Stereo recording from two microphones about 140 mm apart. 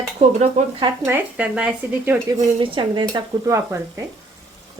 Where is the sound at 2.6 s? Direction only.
35° right (ahead or behind).